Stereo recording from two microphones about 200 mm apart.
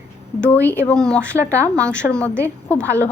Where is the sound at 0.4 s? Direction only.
10° left (ahead or behind).